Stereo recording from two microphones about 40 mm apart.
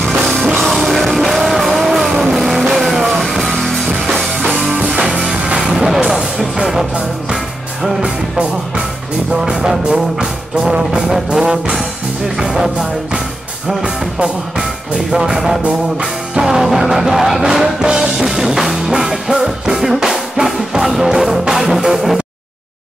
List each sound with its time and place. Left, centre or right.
0.2 s music: centre
4.7 s music: right
5.0 s music: centre
6.0 s music: centre
8.0 s music: right
9.3 s music: centre
12.4 s music: centre
13.7 s music: centre
21.9 s a sound: centre